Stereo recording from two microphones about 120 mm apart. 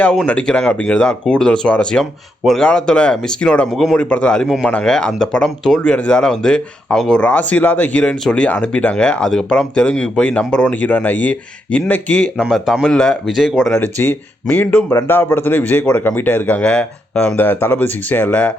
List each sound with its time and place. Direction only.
0.0 s speech: 10° left (ahead or behind)
13.7 s speech: 15° left (ahead or behind)